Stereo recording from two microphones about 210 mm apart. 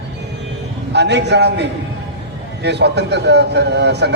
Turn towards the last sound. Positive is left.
turn(degrees=-55)  # may be behind; listen again after turning